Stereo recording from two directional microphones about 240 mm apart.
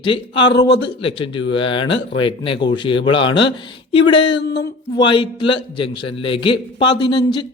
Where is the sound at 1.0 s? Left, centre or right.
Left.